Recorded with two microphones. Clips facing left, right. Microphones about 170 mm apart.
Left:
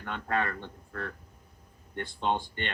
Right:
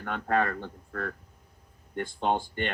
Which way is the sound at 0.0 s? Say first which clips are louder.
Right 4 dB; 45° right (ahead or behind).